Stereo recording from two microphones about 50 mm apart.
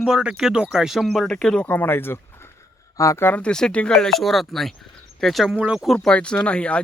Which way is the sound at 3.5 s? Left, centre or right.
Centre.